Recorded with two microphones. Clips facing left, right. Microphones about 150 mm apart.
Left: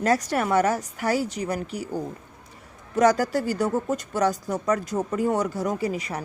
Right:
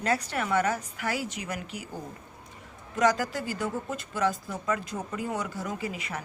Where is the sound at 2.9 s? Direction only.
40° left (ahead or behind).